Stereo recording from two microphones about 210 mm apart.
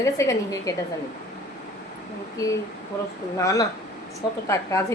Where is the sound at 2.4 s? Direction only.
15° left (ahead or behind).